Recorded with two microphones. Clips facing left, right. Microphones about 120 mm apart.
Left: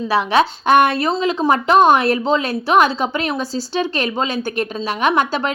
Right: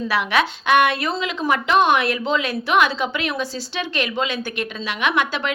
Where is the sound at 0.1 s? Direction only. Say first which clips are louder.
Left 6 dB; 30° left (ahead or behind).